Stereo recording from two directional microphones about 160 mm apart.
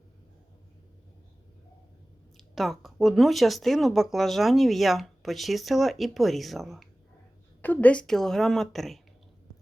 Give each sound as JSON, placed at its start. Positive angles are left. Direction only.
{"t": 2.6, "sound": "speech", "side_deg": 0}